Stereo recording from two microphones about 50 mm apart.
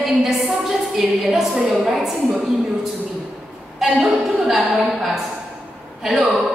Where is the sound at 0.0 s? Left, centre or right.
Centre.